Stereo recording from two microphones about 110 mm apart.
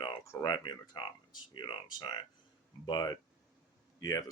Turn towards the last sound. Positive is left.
turn(degrees=30)  # may be behind; listen again after turning